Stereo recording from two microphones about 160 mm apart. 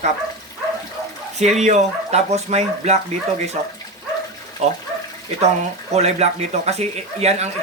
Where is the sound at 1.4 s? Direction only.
45° right (ahead or behind).